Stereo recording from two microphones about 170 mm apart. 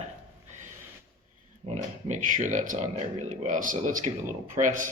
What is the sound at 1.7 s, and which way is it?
A man's voice, 45° right (ahead or behind).